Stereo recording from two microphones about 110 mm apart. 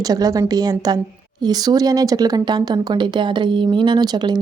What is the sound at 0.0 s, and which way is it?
Speech, 35° right (ahead or behind).